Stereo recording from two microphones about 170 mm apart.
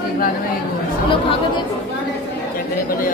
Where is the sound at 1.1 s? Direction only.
30° left (ahead or behind).